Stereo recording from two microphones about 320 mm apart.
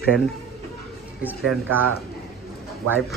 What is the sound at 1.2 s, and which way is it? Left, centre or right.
Speech, centre.